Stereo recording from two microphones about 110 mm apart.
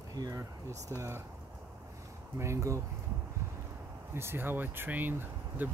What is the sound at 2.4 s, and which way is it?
Speech, 25° right (ahead or behind).